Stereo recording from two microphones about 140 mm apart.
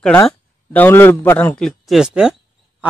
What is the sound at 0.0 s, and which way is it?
A man's voice, 10° left (ahead or behind).